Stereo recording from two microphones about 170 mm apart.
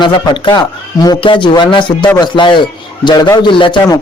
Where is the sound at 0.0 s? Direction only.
30° left (ahead or behind).